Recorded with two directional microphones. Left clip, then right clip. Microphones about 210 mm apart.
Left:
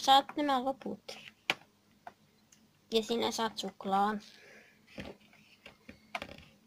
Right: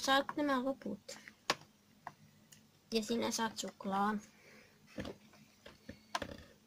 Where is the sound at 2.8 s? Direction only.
10° left (ahead or behind).